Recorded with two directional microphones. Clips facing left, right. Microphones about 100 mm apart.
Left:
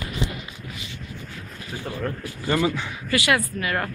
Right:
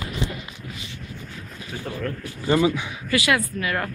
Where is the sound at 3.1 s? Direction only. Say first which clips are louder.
Even; 25° left (ahead or behind).